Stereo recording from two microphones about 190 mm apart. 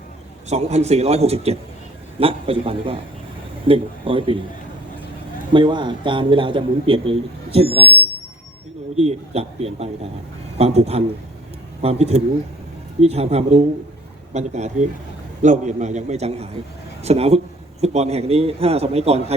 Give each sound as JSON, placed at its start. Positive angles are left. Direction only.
{"t": 0.5, "sound": "a man's voice", "side_deg": -35}
{"t": 5.5, "sound": "a man's voice", "side_deg": -25}
{"t": 9.0, "sound": "a man's voice", "side_deg": -35}